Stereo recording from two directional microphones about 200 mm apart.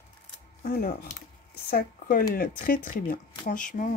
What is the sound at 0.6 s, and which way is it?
Speech, 45° left (ahead or behind).